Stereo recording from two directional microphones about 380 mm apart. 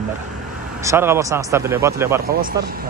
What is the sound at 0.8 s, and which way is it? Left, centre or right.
Speech, centre.